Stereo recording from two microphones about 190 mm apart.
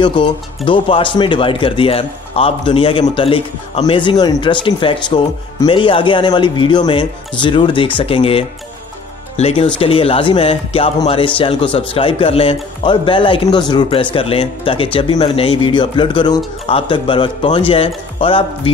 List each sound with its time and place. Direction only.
0.0 s a man's voice: 25° left (ahead or behind)